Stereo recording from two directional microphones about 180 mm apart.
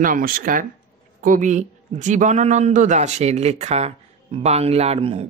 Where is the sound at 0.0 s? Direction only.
50° right (ahead or behind).